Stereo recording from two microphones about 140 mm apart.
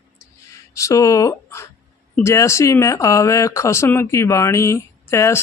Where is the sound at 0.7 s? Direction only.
20° left (ahead or behind).